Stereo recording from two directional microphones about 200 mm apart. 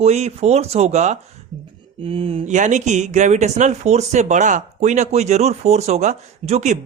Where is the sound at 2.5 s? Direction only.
35° right (ahead or behind).